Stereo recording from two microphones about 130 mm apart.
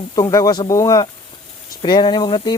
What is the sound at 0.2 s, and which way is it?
Speech, 25° left (ahead or behind).